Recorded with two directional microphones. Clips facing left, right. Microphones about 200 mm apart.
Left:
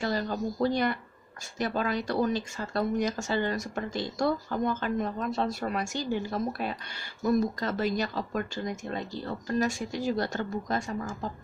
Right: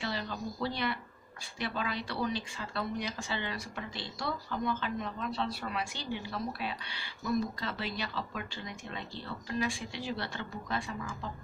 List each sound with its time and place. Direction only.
0.0 s speech: 45° left (ahead or behind)